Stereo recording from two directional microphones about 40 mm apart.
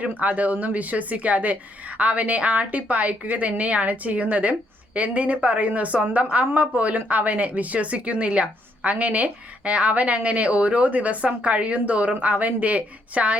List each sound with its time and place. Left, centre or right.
0.0 s a woman's voice: right